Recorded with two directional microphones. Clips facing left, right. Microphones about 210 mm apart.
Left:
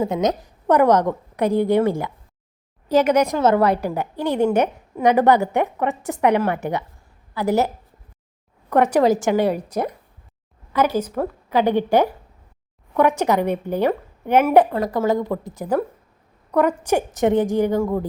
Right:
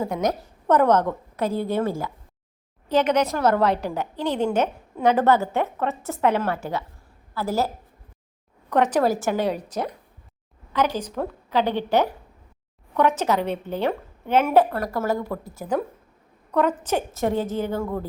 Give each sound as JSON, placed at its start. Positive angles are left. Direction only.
{"t": 0.0, "sound": "a woman's voice", "side_deg": 20}
{"t": 8.7, "sound": "a woman's voice", "side_deg": 10}